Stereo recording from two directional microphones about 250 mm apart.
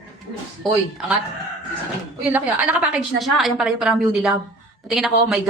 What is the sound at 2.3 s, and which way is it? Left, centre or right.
Speech, centre.